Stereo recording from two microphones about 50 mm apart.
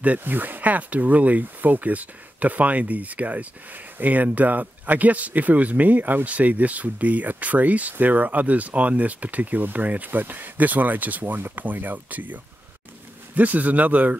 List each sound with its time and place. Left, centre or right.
0.2 s speech: right